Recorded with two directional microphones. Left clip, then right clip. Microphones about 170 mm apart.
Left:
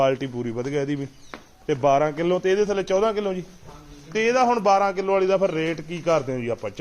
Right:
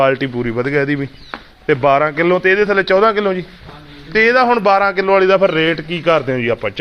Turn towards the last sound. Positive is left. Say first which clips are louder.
# right 10 dB
turn(degrees=0)  # may be behind; listen again after turning